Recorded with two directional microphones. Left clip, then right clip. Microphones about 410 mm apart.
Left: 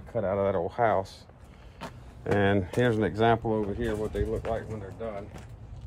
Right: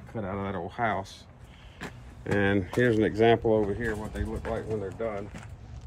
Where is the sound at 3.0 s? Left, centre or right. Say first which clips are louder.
Right 3 dB; left.